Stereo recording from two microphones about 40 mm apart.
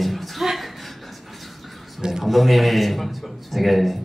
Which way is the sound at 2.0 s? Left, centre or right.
Centre.